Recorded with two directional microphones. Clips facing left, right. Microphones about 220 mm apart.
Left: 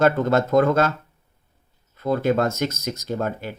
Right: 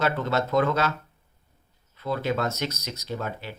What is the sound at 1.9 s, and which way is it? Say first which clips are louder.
Speech: left 7 dB; 45° left (ahead or behind).